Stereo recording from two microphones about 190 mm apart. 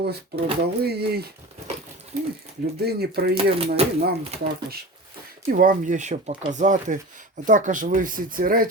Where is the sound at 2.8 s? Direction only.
55° right (ahead or behind).